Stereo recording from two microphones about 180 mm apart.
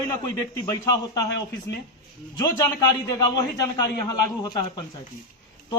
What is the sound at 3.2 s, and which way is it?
Speech, 20° left (ahead or behind).